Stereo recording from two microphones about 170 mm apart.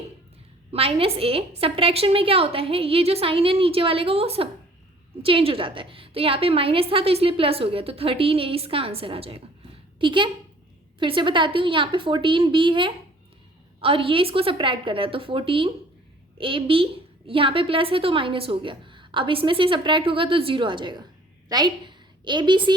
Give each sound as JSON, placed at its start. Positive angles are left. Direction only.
{"t": 0.7, "sound": "a woman's voice", "side_deg": -35}